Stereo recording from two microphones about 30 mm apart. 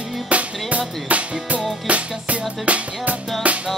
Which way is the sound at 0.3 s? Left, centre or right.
Right.